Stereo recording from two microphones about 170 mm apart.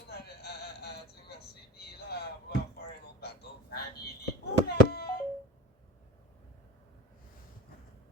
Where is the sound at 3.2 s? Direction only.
70° left (ahead or behind).